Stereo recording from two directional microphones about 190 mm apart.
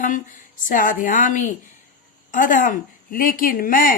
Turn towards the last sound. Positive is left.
turn(degrees=45)  # may be behind; listen again after turning